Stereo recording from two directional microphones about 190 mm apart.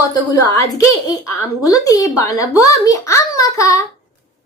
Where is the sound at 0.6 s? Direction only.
15° left (ahead or behind).